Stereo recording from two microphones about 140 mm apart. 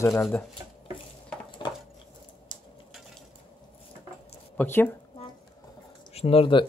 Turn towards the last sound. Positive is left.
turn(degrees=40)  # may be behind; listen again after turning